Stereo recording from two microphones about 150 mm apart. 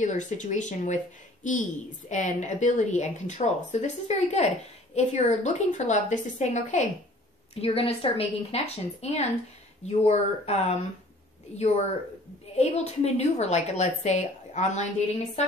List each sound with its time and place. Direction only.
0.0 s a woman's voice: 55° left (ahead or behind)
7.5 s a woman's voice: 40° left (ahead or behind)